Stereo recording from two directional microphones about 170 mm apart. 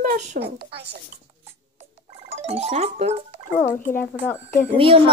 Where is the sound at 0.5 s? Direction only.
70° right (ahead or behind).